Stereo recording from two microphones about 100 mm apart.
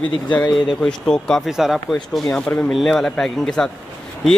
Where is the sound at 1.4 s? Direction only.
5° right (ahead or behind).